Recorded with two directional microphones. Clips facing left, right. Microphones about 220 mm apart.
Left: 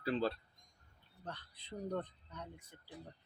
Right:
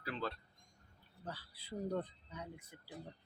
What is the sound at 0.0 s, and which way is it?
Speech, 30° left (ahead or behind).